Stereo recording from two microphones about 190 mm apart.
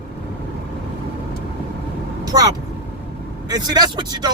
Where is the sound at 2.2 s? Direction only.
20° right (ahead or behind).